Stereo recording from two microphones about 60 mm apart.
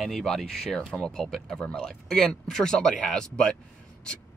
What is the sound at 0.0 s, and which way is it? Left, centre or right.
Speech, centre.